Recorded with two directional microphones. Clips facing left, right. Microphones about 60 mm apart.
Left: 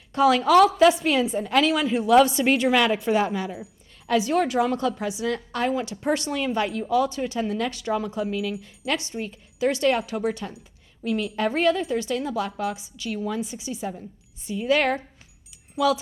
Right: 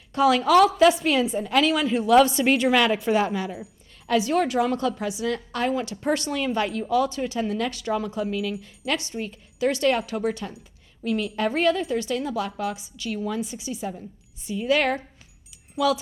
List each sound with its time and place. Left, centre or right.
0.1 s a woman's voice: left
0.9 s a woman's voice: left
1.3 s a woman's voice: left
1.7 s a woman's voice: centre
4.1 s a woman's voice: centre; by 15.0 s left
15.4 s a sound: left